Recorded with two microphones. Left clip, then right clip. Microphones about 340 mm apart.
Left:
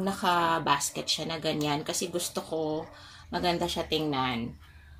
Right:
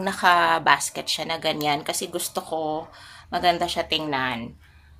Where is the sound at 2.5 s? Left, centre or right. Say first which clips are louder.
Right 4 dB; right.